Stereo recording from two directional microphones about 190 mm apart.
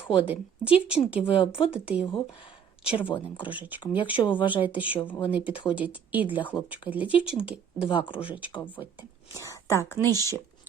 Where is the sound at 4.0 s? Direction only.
25° left (ahead or behind).